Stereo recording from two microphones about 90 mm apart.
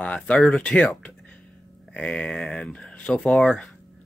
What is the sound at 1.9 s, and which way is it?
Speech, 10° left (ahead or behind).